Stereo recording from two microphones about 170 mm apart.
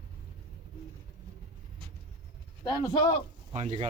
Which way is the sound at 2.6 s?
25° left (ahead or behind).